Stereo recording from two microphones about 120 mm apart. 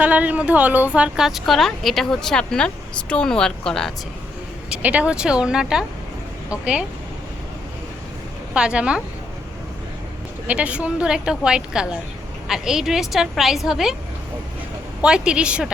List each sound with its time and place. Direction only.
0.0 s a woman's voice: 10° right (ahead or behind); by 3.9 s 5° left (ahead or behind)
4.7 s a woman's voice: 10° right (ahead or behind)
8.5 s a woman's voice: 10° right (ahead or behind)
10.4 s a woman's voice: 10° right (ahead or behind)
15.0 s a woman's voice: 5° right (ahead or behind)